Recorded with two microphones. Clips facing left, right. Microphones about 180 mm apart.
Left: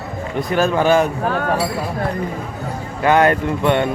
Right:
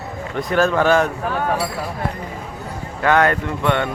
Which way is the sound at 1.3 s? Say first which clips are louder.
Left 2 dB; 40° left (ahead or behind).